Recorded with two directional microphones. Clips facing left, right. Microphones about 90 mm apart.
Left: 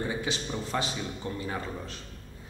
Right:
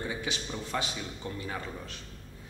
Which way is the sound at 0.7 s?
30° left (ahead or behind).